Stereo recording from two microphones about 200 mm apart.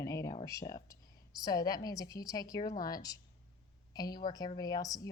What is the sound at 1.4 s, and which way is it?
A woman's voice, 20° left (ahead or behind).